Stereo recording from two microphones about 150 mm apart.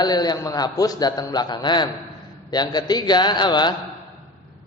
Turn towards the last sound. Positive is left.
turn(degrees=30)  # may be behind; listen again after turning